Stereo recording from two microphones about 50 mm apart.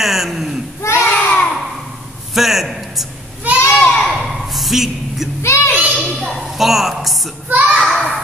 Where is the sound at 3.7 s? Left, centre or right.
Centre.